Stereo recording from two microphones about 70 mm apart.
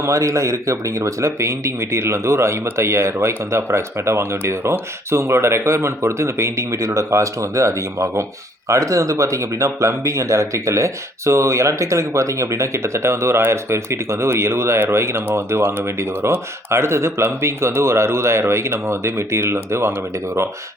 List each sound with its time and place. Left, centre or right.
0.0 s speech: right